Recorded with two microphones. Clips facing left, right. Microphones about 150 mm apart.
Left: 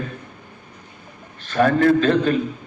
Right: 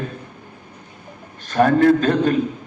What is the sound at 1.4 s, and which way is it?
Speech, 40° right (ahead or behind).